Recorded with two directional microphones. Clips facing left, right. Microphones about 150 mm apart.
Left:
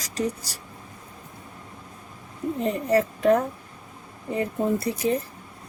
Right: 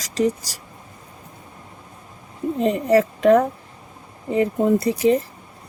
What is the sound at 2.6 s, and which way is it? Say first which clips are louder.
Speech: right 5 dB; 90° right.